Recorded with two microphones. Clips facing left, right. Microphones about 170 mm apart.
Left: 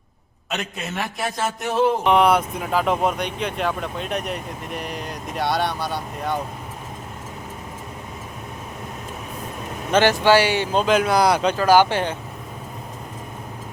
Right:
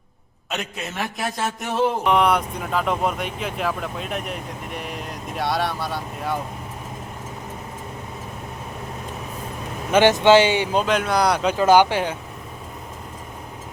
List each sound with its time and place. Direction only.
0.5 s speech: centre (ahead or behind)
9.9 s speech: 20° right (ahead or behind)
10.8 s speech: 5° left (ahead or behind)
11.5 s speech: 20° right (ahead or behind)